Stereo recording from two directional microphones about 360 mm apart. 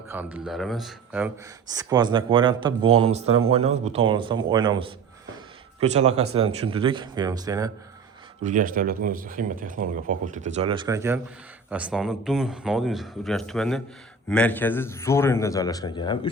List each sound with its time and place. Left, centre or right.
0.1 s speech: centre
3.2 s speech: right
3.5 s speech: centre
8.4 s a man's voice: right; by 16.3 s centre